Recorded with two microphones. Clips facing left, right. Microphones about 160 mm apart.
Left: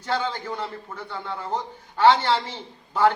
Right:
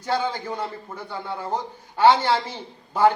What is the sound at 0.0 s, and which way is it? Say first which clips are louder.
A man's voice: right 2 dB; 10° right (ahead or behind).